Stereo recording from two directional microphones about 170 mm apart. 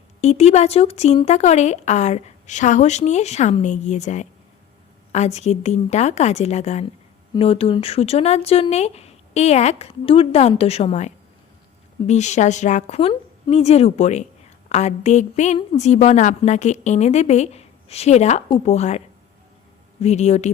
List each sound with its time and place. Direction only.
0.2 s a woman's voice: 40° left (ahead or behind)